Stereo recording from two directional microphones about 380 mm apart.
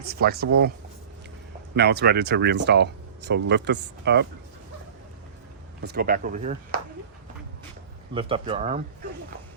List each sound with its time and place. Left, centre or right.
0.0 s speech: right
1.7 s speech: right
5.8 s speech: right
8.1 s speech: centre